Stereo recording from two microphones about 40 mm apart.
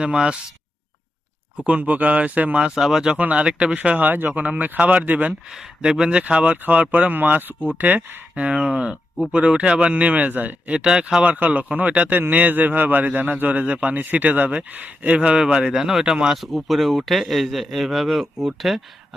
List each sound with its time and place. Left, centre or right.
0.0 s speech: right
1.5 s speech: right
2.7 s speech: centre
3.2 s speech: right
3.4 s speech: right
3.8 s speech: right
4.4 s speech: right
5.5 s speech: centre; by 7.2 s right
7.2 s speech: right
8.6 s speech: right
10.7 s speech: right
11.2 s speech: right
15.4 s speech: right
16.4 s speech: centre